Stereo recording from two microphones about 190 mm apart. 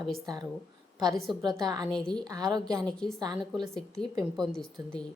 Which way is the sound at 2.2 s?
20° right (ahead or behind).